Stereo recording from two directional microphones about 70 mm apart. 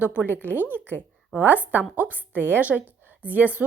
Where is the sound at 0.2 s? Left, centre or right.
Right.